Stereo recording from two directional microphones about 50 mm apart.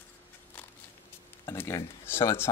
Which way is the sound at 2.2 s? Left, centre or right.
Left.